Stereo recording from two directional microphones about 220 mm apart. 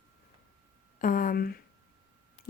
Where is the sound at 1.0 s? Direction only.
40° left (ahead or behind).